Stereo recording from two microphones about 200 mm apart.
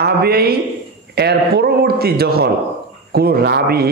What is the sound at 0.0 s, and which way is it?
A man's voice, 50° right (ahead or behind).